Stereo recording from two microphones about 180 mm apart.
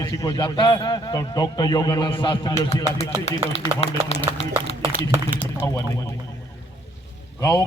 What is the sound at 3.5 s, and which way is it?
Speech, 35° left (ahead or behind).